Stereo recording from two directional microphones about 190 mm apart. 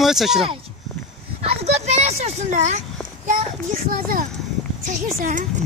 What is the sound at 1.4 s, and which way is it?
A child's voice, 30° right (ahead or behind).